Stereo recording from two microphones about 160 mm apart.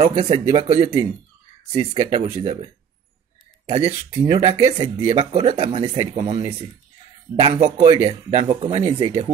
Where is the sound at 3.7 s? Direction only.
40° right (ahead or behind); by 8.1 s 25° right (ahead or behind).